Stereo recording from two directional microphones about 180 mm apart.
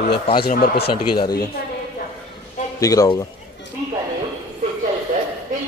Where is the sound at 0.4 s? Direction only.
55° left (ahead or behind).